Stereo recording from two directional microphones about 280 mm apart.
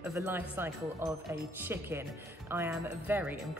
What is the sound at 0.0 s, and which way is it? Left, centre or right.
A woman's voice, centre.